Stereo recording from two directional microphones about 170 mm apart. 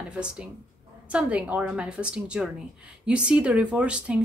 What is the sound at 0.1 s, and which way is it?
A woman's voice, 5° right (ahead or behind).